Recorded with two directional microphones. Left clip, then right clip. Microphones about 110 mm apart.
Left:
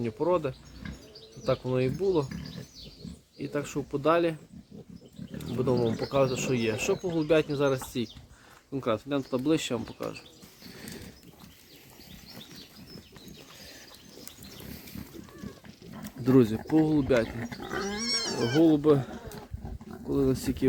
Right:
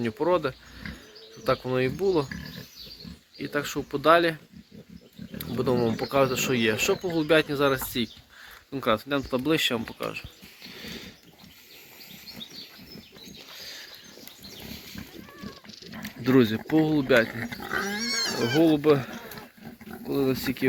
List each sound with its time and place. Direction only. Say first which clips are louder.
0.0 s speech: right 3 dB; centre (ahead or behind)
3.3 s speech: right 3 dB; 5° left (ahead or behind)
5.4 s speech: right 2 dB; centre (ahead or behind)
10.8 s a sound: right 5 dB; 35° left (ahead or behind)
13.6 s a sound: right 10 dB; 55° left (ahead or behind)
15.9 s a sound: right 1 dB; 30° left (ahead or behind)
16.6 s speech: right 1 dB; 15° left (ahead or behind)
17.2 s speech: right 4 dB; 25° left (ahead or behind)
18.2 s cat: right 3 dB; centre (ahead or behind)
18.6 s speech: right 1 dB; 20° left (ahead or behind)